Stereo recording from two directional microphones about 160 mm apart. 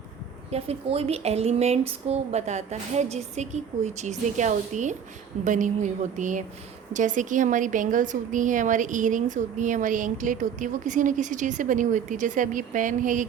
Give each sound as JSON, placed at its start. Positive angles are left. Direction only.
{"t": 0.5, "sound": "a woman's voice", "side_deg": -40}